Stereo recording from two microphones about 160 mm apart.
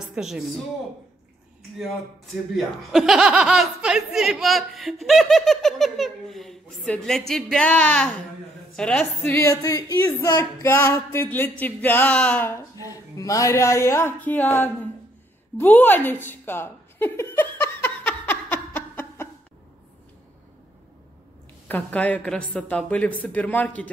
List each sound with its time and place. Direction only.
0.1 s speech: centre (ahead or behind)
2.5 s speech: centre (ahead or behind)
9.3 s speech: 20° left (ahead or behind)
15.5 s a sound: 10° left (ahead or behind)
21.6 s speech: 10° left (ahead or behind)